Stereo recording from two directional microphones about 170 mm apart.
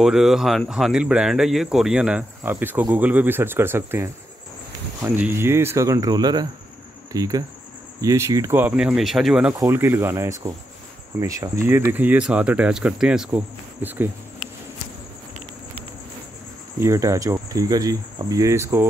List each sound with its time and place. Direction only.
0.0 s speech: centre (ahead or behind)
16.8 s speech: 15° right (ahead or behind)